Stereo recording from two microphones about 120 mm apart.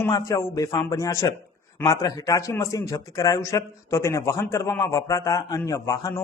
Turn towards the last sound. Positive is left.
turn(degrees=30)  # may be behind; listen again after turning